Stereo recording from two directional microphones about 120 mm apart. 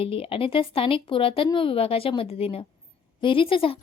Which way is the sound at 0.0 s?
50° left (ahead or behind).